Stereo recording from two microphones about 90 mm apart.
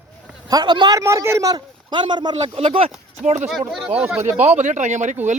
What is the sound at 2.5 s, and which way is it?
Speech, 90° right.